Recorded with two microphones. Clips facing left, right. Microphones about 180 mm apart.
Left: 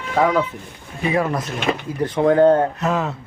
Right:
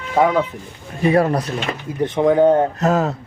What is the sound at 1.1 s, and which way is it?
Speech, 35° right (ahead or behind).